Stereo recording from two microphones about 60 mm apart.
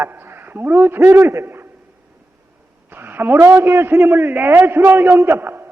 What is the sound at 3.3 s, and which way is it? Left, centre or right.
Speech, right.